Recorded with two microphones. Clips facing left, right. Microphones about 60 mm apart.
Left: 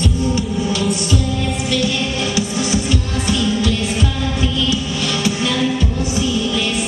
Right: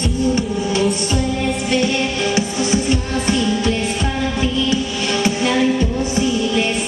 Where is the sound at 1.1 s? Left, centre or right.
Right.